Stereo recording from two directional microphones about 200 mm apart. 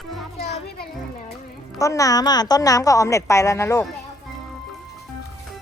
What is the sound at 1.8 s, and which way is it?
A woman's voice, 15° left (ahead or behind).